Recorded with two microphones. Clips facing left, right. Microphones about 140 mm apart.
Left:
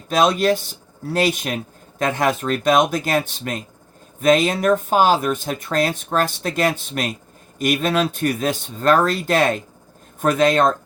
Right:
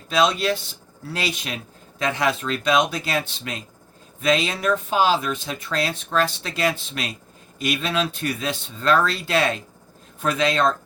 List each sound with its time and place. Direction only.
0.1 s speech: 45° left (ahead or behind)